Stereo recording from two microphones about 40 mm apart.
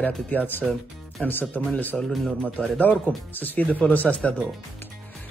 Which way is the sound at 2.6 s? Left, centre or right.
Left.